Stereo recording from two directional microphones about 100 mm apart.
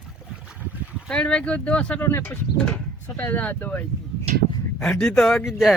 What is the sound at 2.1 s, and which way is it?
Speech, 25° left (ahead or behind).